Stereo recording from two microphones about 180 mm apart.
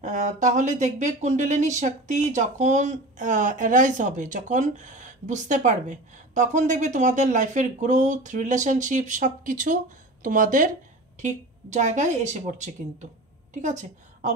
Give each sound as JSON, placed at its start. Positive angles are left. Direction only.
{"t": 0.0, "sound": "speech", "side_deg": -40}